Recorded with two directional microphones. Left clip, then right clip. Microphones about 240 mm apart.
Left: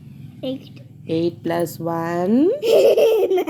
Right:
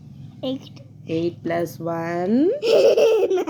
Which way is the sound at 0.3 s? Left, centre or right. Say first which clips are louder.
Even; right.